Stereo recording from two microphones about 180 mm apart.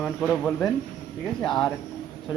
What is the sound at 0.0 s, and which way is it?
Speech, 5° left (ahead or behind).